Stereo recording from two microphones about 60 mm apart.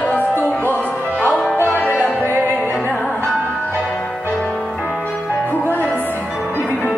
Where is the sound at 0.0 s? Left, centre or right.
Left.